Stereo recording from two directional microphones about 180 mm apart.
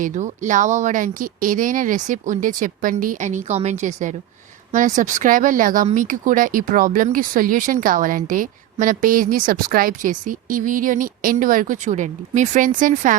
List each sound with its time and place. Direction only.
0.0 s speech: 45° right (ahead or behind)